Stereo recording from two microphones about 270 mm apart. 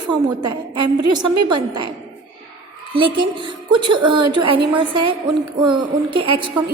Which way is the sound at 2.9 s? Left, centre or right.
Centre.